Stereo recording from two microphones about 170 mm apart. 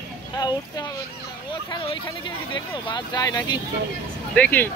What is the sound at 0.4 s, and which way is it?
Speech, 25° left (ahead or behind).